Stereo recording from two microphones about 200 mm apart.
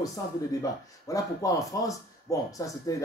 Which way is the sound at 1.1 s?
15° left (ahead or behind).